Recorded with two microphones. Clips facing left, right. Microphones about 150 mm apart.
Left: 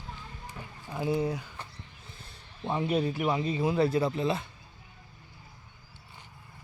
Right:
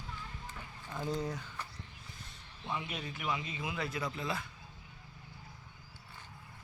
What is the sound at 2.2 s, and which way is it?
Speech, 35° left (ahead or behind).